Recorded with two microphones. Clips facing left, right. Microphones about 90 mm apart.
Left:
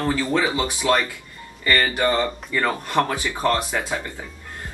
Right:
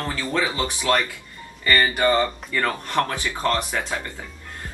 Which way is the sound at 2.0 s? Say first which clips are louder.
Right 1 dB; 10° left (ahead or behind).